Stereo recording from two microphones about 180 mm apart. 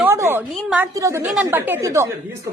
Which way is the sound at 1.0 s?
15° right (ahead or behind).